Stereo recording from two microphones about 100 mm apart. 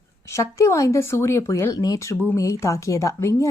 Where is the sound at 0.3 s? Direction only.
30° left (ahead or behind).